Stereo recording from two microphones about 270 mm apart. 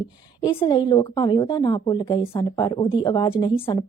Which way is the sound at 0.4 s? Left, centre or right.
Centre.